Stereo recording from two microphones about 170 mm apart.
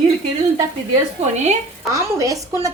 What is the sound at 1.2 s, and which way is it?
Speech, 40° right (ahead or behind).